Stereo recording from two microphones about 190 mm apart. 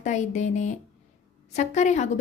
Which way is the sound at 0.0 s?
40° left (ahead or behind).